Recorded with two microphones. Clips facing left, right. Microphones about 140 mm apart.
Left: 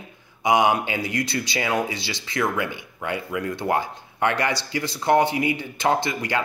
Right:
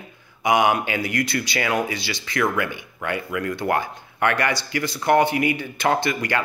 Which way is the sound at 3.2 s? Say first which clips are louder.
Right 1 dB; 25° left (ahead or behind).